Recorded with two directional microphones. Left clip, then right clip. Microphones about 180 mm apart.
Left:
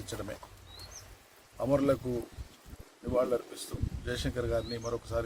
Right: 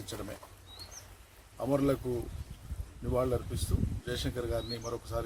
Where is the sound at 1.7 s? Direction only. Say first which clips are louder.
Left 2 dB; 5° left (ahead or behind).